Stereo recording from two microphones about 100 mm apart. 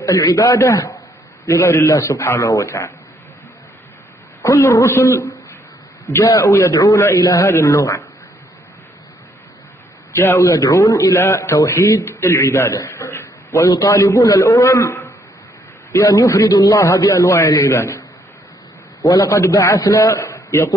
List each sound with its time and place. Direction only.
0.0 s a man's voice: 35° left (ahead or behind)
4.4 s a man's voice: 30° left (ahead or behind)
10.1 s a man's voice: 30° left (ahead or behind)
19.0 s a man's voice: 35° left (ahead or behind)